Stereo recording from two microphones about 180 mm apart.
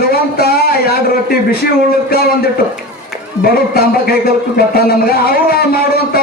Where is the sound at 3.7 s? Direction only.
55° left (ahead or behind).